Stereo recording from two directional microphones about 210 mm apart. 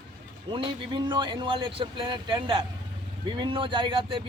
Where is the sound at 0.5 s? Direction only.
25° right (ahead or behind).